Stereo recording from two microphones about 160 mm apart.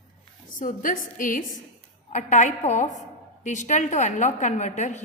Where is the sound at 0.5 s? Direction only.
55° left (ahead or behind).